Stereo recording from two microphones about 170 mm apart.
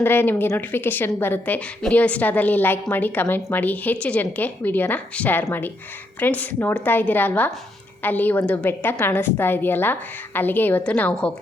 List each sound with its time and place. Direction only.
0.0 s a woman's voice: 10° left (ahead or behind)